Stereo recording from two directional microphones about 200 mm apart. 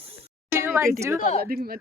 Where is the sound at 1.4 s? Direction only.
50° right (ahead or behind).